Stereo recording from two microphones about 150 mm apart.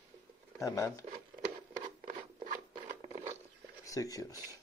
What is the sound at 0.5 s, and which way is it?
Speech, 20° left (ahead or behind).